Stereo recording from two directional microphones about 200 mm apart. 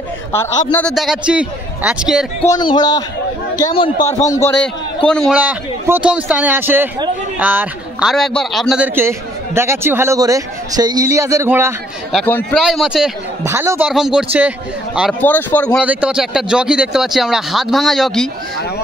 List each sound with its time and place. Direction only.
0.4 s speech: 5° left (ahead or behind)
2.5 s a man's voice: 20° left (ahead or behind)
5.0 s a man's voice: 5° left (ahead or behind); by 11.7 s 10° right (ahead or behind)
12.1 s speech: 5° left (ahead or behind)
12.6 s speech: 5° right (ahead or behind)
13.4 s a man's voice: 15° right (ahead or behind)
15.2 s speech: 10° left (ahead or behind)
15.8 s speech: 5° right (ahead or behind)